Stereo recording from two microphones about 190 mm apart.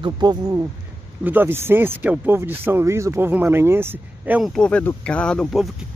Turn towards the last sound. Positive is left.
turn(degrees=0)  # may be behind; listen again after turning